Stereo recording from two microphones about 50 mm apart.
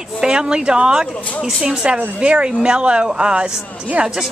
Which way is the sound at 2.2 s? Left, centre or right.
Right.